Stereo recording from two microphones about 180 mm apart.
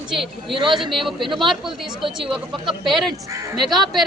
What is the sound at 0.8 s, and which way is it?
Speech, centre (ahead or behind).